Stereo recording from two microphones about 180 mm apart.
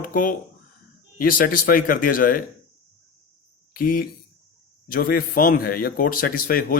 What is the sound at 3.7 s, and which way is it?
Speech, 55° left (ahead or behind).